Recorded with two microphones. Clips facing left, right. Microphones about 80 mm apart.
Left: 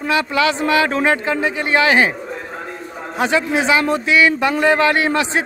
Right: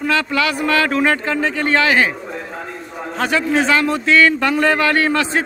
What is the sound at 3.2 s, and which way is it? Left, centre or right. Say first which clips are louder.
A man's voice: even; centre.